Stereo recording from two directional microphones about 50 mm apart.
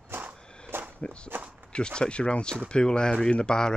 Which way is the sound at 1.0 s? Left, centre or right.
Left.